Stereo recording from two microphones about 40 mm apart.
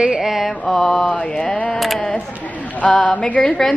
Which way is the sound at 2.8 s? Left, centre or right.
Left.